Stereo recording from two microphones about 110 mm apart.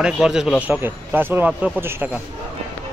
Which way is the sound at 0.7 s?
15° right (ahead or behind).